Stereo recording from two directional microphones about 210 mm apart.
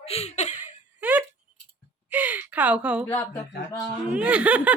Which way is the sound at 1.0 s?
10° right (ahead or behind).